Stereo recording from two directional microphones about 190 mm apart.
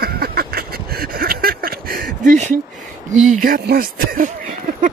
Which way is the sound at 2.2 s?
40° right (ahead or behind).